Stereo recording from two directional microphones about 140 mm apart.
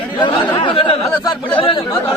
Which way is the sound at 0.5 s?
40° left (ahead or behind).